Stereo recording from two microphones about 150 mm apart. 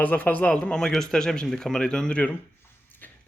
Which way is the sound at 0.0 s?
10° left (ahead or behind).